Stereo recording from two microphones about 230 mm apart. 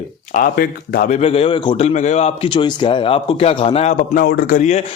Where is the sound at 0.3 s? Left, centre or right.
Left.